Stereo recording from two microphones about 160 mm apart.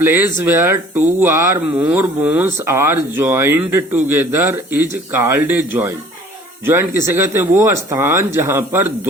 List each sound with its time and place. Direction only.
0.0 s speech: 15° right (ahead or behind)